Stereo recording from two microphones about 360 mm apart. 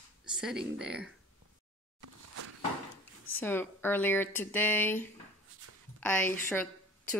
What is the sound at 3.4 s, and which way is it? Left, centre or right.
Speech, centre.